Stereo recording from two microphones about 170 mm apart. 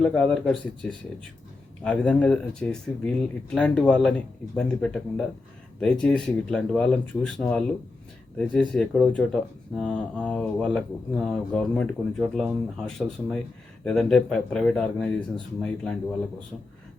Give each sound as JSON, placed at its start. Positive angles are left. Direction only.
{"t": 0.0, "sound": "speech", "side_deg": 5}